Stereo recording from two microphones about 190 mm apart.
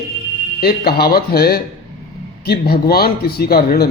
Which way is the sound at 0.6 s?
55° left (ahead or behind).